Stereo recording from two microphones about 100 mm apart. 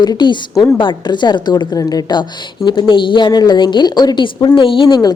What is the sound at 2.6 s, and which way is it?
Speech, 50° left (ahead or behind).